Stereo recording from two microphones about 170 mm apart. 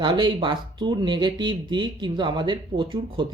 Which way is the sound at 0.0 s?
30° right (ahead or behind).